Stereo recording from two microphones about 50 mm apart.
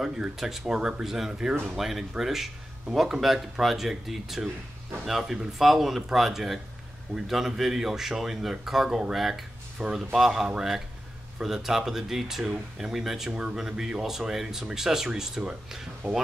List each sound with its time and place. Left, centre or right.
0.0 s speech: centre
0.7 s speech: centre